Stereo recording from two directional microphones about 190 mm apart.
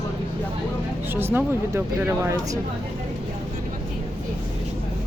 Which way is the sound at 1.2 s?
10° right (ahead or behind).